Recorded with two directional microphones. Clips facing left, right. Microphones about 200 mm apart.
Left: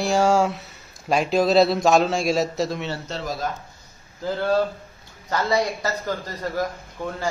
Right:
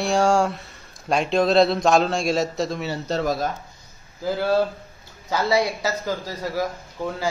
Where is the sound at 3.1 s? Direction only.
40° right (ahead or behind).